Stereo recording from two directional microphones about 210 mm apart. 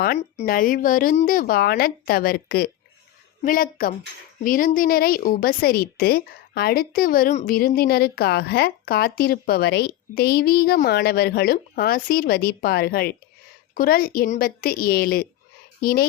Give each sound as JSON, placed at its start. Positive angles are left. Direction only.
{"t": 0.4, "sound": "a woman's voice", "side_deg": 40}